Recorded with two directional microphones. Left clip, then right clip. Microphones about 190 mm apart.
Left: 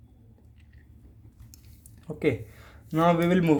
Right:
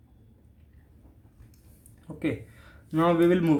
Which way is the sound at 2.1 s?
30° left (ahead or behind).